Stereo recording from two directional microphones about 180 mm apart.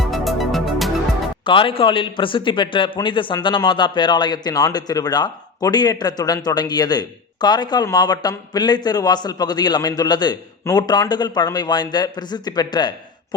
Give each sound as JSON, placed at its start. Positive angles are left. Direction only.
{"t": 0.0, "sound": "music", "side_deg": 0}
{"t": 1.5, "sound": "a man's voice", "side_deg": 30}